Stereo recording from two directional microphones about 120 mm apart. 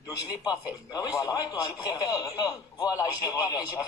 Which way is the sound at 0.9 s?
30° left (ahead or behind).